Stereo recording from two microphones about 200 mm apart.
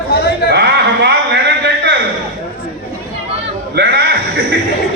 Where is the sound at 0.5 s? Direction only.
55° right (ahead or behind).